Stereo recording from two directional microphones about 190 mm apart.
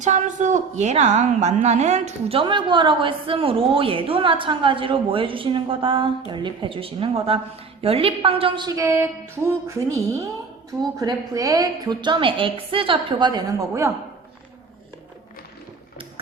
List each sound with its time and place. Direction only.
0.0 s a woman's voice: 40° right (ahead or behind); by 13.9 s 15° right (ahead or behind)